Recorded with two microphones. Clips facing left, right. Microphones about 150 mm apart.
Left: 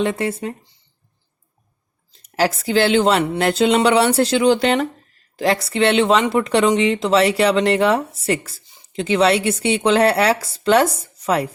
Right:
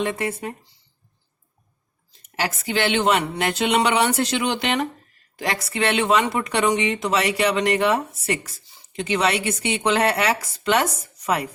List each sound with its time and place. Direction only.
0.0 s speech: 30° left (ahead or behind)
2.4 s speech: 35° left (ahead or behind)